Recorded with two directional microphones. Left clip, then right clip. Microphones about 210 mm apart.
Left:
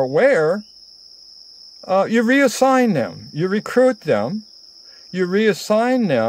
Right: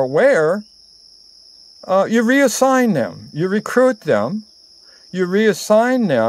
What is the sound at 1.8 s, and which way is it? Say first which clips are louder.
Speech: right 1 dB; 5° left (ahead or behind).